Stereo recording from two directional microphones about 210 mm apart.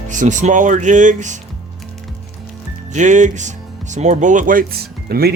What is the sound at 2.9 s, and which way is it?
Speech, 35° right (ahead or behind).